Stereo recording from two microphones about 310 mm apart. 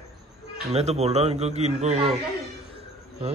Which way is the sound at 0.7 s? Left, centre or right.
Right.